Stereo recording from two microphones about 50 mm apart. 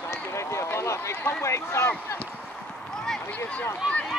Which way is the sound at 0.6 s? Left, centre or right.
Left.